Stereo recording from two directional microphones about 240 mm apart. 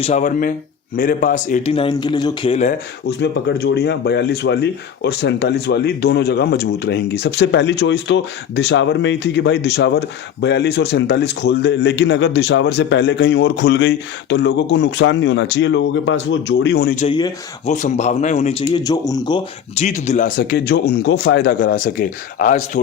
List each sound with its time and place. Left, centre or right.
0.0 s a man's voice: left
3.1 s speech: left
17.1 s speech: centre
17.7 s a man's voice: left